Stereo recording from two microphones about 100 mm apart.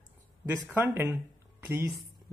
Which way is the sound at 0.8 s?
25° right (ahead or behind).